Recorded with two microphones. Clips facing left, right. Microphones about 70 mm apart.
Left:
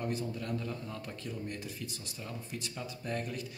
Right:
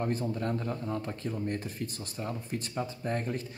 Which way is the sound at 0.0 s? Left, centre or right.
Right.